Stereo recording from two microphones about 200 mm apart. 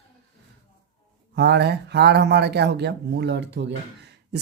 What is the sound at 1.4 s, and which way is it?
Speech, 55° right (ahead or behind).